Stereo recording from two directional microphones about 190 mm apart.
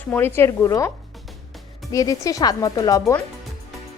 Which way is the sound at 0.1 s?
10° left (ahead or behind).